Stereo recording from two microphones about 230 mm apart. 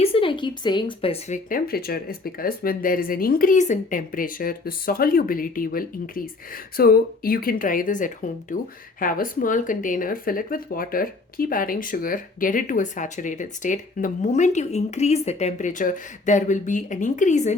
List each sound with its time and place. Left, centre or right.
0.0 s speech: left